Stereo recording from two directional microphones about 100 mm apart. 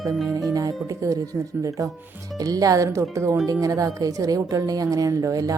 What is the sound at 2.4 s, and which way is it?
Speech, 35° right (ahead or behind).